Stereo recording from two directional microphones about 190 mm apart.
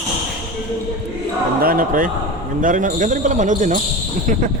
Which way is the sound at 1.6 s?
50° right (ahead or behind).